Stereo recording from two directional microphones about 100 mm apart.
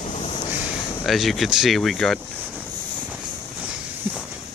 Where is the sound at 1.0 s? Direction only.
Centre (ahead or behind).